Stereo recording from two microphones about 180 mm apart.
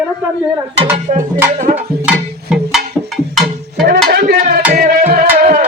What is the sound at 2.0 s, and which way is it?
Music, centre (ahead or behind).